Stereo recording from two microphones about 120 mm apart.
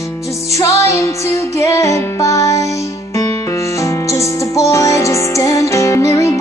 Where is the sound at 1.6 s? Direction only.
25° left (ahead or behind).